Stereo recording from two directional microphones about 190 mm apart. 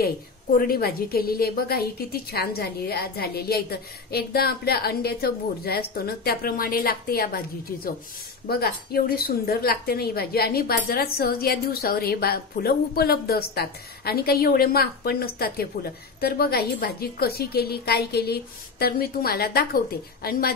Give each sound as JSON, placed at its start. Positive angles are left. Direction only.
{"t": 0.6, "sound": "a woman's voice", "side_deg": 50}